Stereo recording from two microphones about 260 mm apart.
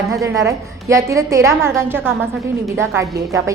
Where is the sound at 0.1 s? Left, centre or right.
Centre.